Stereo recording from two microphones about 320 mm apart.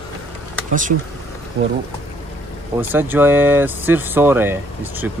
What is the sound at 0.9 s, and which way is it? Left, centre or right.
Speech, right.